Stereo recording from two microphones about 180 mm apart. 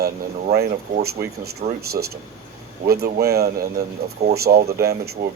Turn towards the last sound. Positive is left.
turn(degrees=-60)  # may be behind; listen again after turning